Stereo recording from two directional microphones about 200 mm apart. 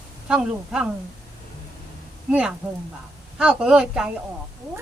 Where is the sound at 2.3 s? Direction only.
5° right (ahead or behind).